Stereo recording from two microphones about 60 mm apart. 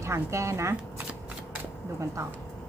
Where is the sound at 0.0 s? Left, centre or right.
Right.